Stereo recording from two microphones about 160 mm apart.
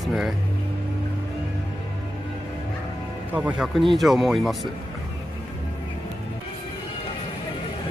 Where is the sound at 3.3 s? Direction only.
5° right (ahead or behind).